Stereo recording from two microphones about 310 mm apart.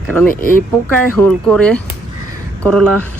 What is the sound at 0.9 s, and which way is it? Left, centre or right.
Speech, centre.